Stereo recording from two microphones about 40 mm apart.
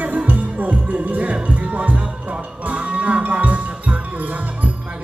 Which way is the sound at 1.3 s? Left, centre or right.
Right.